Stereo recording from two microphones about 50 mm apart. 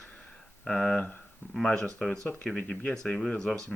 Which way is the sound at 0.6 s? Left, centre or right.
Centre.